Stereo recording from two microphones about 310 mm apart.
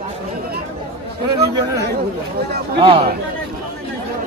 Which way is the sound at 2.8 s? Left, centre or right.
Centre.